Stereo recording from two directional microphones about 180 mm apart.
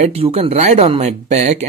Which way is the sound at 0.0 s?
35° right (ahead or behind).